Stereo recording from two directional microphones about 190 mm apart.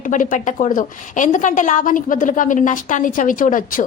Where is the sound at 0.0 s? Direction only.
45° left (ahead or behind).